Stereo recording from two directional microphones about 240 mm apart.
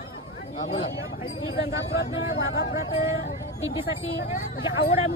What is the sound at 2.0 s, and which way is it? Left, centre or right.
Speech, left.